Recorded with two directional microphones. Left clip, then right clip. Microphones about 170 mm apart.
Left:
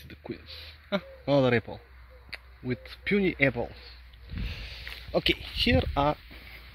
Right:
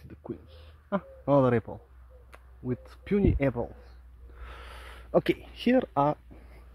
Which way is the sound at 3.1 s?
15° right (ahead or behind).